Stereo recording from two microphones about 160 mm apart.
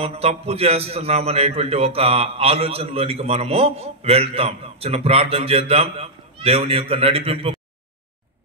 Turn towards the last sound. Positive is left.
turn(degrees=-35)  # may be behind; listen again after turning